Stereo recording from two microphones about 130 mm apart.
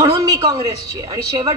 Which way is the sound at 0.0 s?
25° right (ahead or behind).